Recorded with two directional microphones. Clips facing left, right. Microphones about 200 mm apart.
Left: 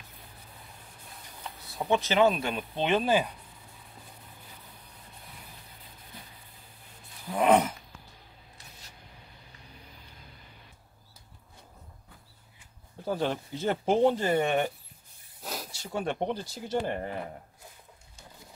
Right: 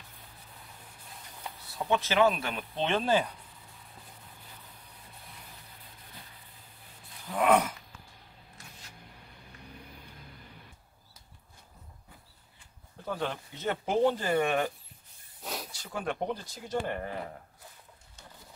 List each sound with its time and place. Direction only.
1.8 s speech: 15° left (ahead or behind)
7.2 s dog: 20° left (ahead or behind)
13.0 s speech: 30° left (ahead or behind)
15.4 s snake: centre (ahead or behind)
15.7 s speech: 25° left (ahead or behind)